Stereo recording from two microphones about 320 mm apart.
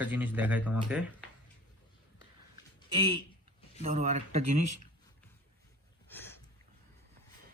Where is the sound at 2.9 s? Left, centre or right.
Centre.